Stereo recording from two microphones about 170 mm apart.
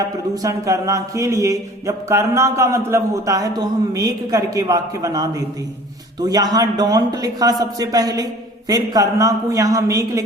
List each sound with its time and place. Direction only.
0.4 s mantra: 20° right (ahead or behind)
3.9 s a man's voice: 20° right (ahead or behind)